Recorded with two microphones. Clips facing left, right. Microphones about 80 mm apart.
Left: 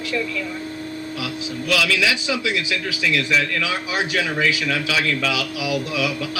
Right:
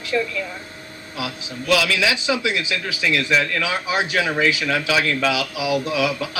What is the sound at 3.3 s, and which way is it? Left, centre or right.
A woman's voice, right.